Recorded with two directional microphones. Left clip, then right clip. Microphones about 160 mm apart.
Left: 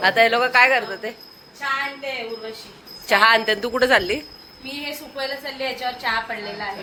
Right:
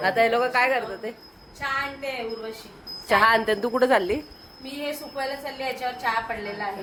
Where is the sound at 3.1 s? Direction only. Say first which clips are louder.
Left 3 dB; 20° right (ahead or behind).